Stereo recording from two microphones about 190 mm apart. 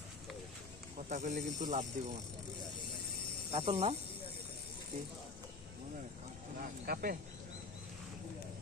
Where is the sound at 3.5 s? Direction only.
30° right (ahead or behind).